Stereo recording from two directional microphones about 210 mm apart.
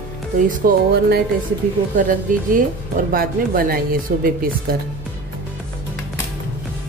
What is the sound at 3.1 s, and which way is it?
Speech, 45° right (ahead or behind).